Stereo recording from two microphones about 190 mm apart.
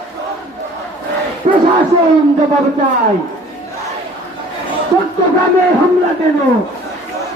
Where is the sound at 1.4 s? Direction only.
35° right (ahead or behind).